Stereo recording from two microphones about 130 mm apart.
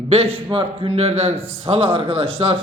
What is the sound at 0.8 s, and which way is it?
Speech, 50° right (ahead or behind).